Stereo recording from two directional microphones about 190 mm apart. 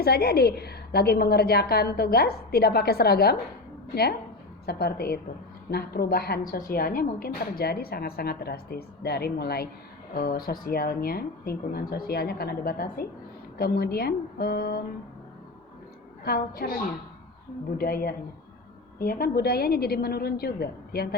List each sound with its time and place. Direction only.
0.0 s a woman's voice: 55° left (ahead or behind)
4.6 s a woman's voice: 55° left (ahead or behind)
16.2 s a woman's voice: 55° left (ahead or behind)
17.7 s a woman's voice: 50° left (ahead or behind)